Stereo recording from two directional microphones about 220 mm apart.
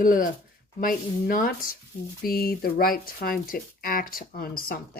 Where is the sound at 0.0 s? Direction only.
40° left (ahead or behind).